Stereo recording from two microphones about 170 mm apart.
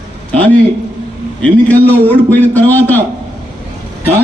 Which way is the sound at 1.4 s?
10° left (ahead or behind).